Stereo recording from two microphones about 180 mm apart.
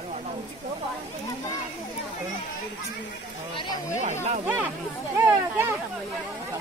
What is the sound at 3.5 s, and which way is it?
Speech, 25° left (ahead or behind).